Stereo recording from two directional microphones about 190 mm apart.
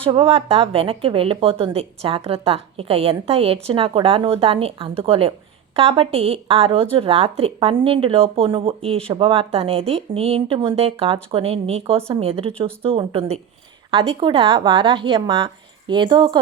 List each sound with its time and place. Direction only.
0.0 s speech: 30° right (ahead or behind)